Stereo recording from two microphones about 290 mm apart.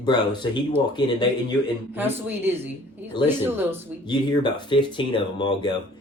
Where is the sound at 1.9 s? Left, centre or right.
Centre.